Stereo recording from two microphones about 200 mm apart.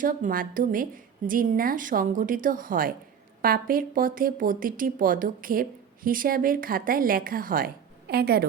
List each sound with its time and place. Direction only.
0.0 s speech: 45° right (ahead or behind)